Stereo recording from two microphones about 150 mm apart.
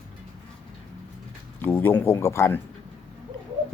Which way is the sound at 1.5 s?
15° left (ahead or behind).